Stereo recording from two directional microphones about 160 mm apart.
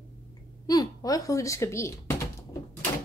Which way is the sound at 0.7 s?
25° left (ahead or behind).